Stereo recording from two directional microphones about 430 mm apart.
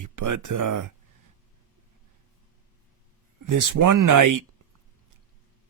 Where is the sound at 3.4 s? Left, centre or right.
Right.